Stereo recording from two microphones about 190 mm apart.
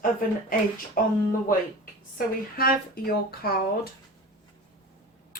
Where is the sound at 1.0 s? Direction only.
45° left (ahead or behind).